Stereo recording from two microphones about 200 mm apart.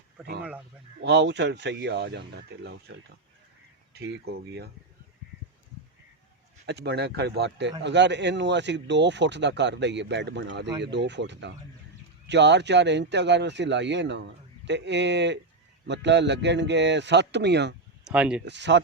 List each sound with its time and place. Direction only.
1.0 s speech: 60° right (ahead or behind)
3.9 s speech: 55° right (ahead or behind)
6.7 s speech: 55° right (ahead or behind)
18.0 s speech: 5° right (ahead or behind)
18.4 s speech: 60° right (ahead or behind)